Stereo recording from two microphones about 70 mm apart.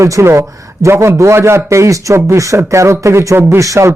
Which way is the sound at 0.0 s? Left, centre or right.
Right.